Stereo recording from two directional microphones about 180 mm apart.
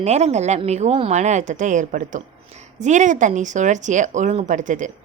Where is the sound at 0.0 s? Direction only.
35° right (ahead or behind).